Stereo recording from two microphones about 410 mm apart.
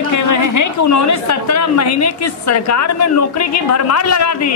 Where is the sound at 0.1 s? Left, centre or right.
Left.